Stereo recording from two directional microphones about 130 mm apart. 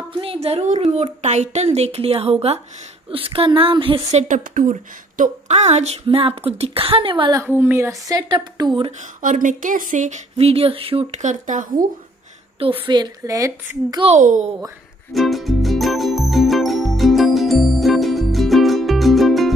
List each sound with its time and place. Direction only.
0.1 s a woman's voice: 45° right (ahead or behind)
6.0 s a woman's voice: 45° right (ahead or behind)
7.4 s speech: 15° right (ahead or behind); by 8.9 s 35° right (ahead or behind)
9.2 s speech: 85° right
10.3 s a woman's voice: 50° right (ahead or behind)
11.1 s speech: 75° right (ahead or behind)
12.8 s speech: 35° right (ahead or behind)
14.1 s a child's voice: 70° right (ahead or behind)
15.1 s music: centre (ahead or behind)